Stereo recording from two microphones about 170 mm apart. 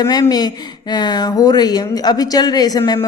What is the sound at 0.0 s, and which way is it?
Speech, 25° left (ahead or behind).